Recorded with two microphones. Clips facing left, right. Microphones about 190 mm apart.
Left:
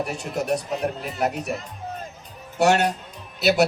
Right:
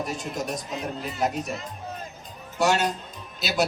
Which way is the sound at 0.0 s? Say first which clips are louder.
Left 3 dB; 65° left (ahead or behind).